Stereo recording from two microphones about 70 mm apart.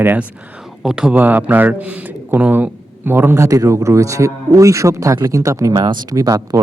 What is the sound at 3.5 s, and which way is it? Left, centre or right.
A man's voice, right.